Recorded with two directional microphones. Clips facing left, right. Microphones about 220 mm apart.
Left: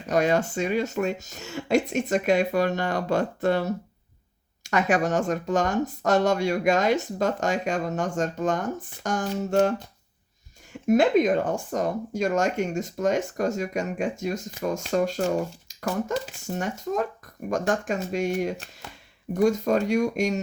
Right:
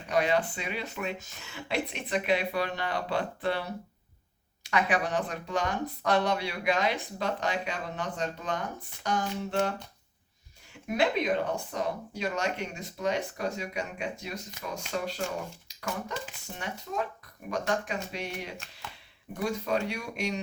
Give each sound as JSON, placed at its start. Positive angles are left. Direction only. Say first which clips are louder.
{"t": 0.1, "sound": "speech", "louder": "left 5 dB", "side_deg": 45}